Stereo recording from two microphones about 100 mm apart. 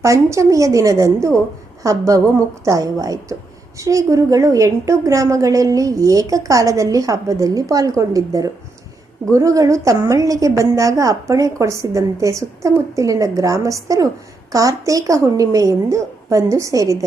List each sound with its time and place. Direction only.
0.0 s a woman's voice: 30° right (ahead or behind)